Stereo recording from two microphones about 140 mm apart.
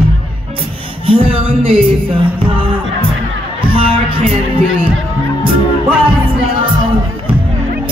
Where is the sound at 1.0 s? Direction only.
40° right (ahead or behind).